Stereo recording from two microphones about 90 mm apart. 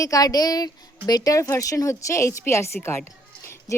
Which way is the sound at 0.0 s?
40° left (ahead or behind).